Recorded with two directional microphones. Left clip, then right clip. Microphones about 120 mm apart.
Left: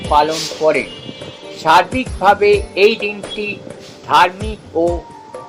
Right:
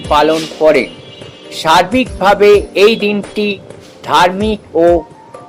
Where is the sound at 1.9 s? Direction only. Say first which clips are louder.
Right 3 dB; 55° right (ahead or behind).